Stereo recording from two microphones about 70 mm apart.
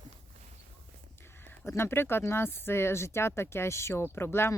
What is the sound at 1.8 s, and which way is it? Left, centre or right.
Speech, left.